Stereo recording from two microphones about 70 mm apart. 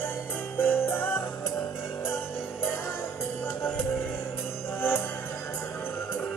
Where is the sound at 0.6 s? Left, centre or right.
Left.